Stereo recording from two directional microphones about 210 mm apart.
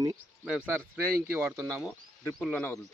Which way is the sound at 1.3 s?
10° right (ahead or behind).